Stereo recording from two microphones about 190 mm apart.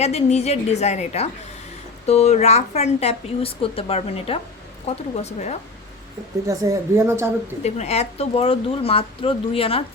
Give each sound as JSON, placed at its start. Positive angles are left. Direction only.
{"t": 0.0, "sound": "a woman's voice", "side_deg": 35}
{"t": 6.5, "sound": "a woman's voice", "side_deg": -15}
{"t": 7.6, "sound": "a woman's voice", "side_deg": 35}